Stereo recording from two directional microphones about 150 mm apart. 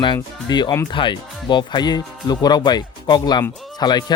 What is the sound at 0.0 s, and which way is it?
Speech, 30° left (ahead or behind).